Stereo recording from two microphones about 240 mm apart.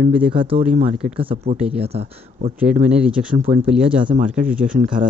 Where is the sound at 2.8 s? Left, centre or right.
Centre.